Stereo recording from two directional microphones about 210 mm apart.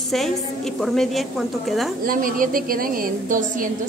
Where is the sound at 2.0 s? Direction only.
40° right (ahead or behind).